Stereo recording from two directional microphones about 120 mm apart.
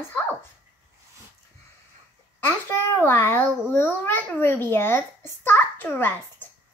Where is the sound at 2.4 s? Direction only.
25° left (ahead or behind).